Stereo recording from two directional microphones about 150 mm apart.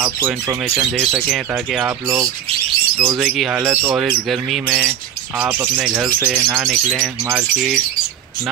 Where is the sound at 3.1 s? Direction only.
Centre (ahead or behind).